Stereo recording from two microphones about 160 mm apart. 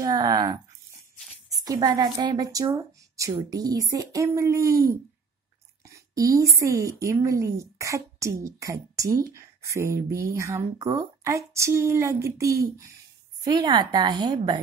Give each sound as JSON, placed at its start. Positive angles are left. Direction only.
{"t": 0.0, "sound": "a woman's voice", "side_deg": -25}
{"t": 5.9, "sound": "whispering", "side_deg": -20}
{"t": 6.6, "sound": "a woman's voice", "side_deg": -20}